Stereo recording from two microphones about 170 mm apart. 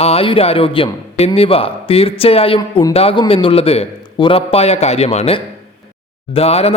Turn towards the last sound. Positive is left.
turn(degrees=35)  # may be behind; listen again after turning